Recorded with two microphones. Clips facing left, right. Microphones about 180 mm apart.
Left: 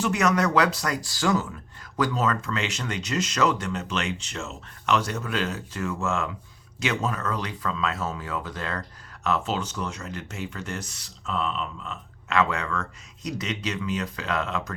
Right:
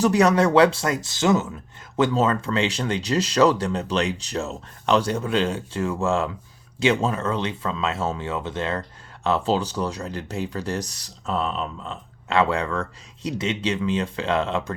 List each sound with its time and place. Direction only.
0.0 s speech: 35° right (ahead or behind)